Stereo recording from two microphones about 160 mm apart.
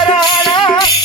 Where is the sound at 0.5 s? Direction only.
30° left (ahead or behind).